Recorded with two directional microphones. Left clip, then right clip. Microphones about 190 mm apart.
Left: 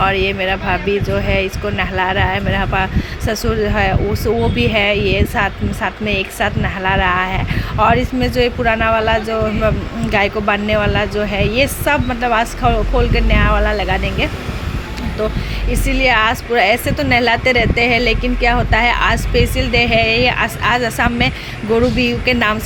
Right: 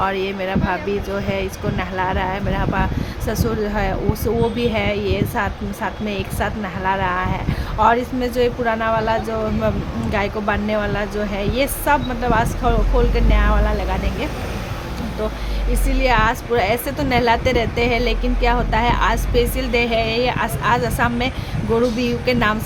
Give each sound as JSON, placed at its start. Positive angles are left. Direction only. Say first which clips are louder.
{"t": 0.0, "sound": "speech", "louder": "left 6 dB", "side_deg": 5}
{"t": 15.7, "sound": "speech", "louder": "left 4 dB", "side_deg": 10}